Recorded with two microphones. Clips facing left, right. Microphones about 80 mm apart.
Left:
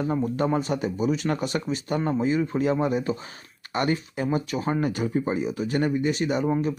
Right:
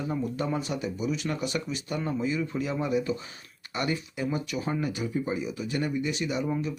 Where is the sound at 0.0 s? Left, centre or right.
Left.